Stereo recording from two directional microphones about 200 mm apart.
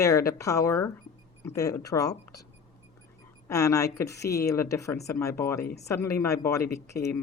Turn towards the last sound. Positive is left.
turn(degrees=15)  # may be behind; listen again after turning